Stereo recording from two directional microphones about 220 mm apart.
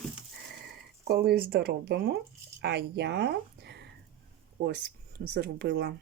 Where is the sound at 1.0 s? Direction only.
45° right (ahead or behind).